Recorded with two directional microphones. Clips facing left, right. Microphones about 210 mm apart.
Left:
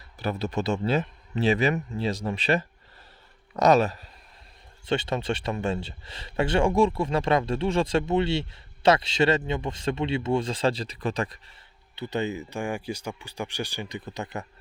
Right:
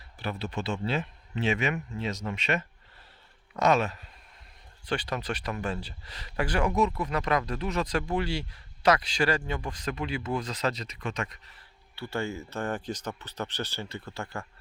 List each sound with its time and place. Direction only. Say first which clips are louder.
0.2 s a man's voice: left 5 dB; 40° left (ahead or behind)
4.9 s speech: left 5 dB; 25° left (ahead or behind)
11.9 s speech: left 4 dB; 20° left (ahead or behind)